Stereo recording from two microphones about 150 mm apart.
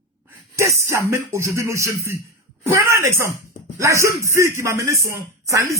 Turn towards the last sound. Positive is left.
turn(degrees=-20)  # may be behind; listen again after turning